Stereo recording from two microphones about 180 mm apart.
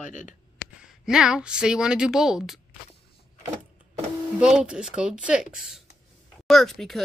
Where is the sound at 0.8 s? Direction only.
5° right (ahead or behind).